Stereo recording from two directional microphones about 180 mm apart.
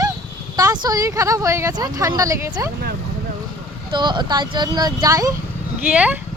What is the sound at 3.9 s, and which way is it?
Speech, 25° right (ahead or behind).